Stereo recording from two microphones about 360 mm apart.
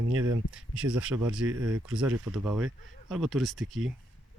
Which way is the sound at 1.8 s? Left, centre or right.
Centre.